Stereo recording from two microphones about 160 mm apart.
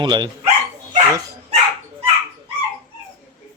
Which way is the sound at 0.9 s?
20° right (ahead or behind).